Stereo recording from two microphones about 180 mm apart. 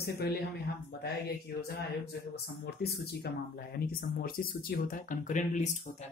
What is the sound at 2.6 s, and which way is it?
Speech, 65° left (ahead or behind).